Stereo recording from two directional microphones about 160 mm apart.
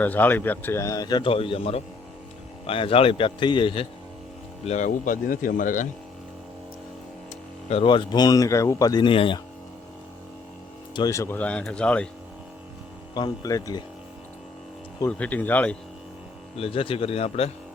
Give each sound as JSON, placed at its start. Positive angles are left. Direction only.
{"t": 0.0, "sound": "speech", "side_deg": 10}
{"t": 4.6, "sound": "speech", "side_deg": 50}
{"t": 7.7, "sound": "speech", "side_deg": 35}
{"t": 10.9, "sound": "speech", "side_deg": 20}
{"t": 13.1, "sound": "speech", "side_deg": 25}
{"t": 15.0, "sound": "speech", "side_deg": 10}
{"t": 16.6, "sound": "speech", "side_deg": 35}